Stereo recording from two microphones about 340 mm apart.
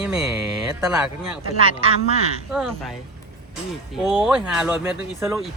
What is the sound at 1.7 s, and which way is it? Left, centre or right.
Speech, centre.